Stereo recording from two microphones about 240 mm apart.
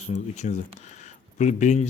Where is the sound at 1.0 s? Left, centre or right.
Left.